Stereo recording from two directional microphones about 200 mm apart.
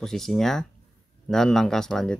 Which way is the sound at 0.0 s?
Centre (ahead or behind).